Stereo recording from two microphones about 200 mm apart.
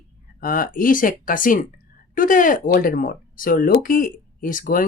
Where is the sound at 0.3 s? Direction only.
45° left (ahead or behind).